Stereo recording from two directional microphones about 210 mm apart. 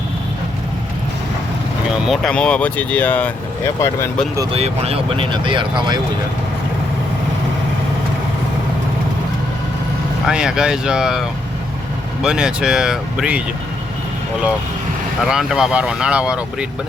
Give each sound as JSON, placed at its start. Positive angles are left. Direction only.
{"t": 2.0, "sound": "speech", "side_deg": 5}
{"t": 4.5, "sound": "speech", "side_deg": -30}
{"t": 10.2, "sound": "speech", "side_deg": -5}
{"t": 15.2, "sound": "speech", "side_deg": 0}